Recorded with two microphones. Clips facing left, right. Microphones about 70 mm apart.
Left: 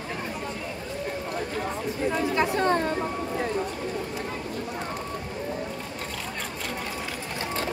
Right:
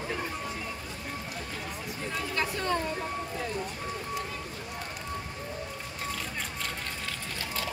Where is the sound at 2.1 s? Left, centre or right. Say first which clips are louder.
Left 7 dB; left.